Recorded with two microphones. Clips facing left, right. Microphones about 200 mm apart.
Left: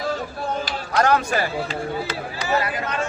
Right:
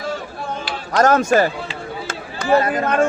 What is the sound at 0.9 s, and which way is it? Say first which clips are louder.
A man's voice: right 5 dB; 45° right (ahead or behind).